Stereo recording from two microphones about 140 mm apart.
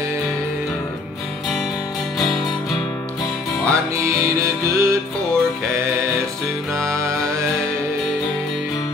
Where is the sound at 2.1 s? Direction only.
Centre (ahead or behind).